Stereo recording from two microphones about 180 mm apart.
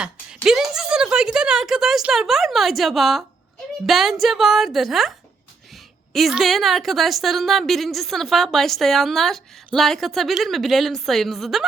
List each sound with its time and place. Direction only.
0.4 s a woman's voice: 5° right (ahead or behind)